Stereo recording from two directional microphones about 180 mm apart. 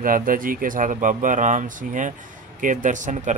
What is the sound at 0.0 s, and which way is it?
Speech, 50° right (ahead or behind).